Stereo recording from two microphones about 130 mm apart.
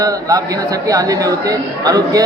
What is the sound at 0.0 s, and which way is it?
A woman's voice, 25° right (ahead or behind).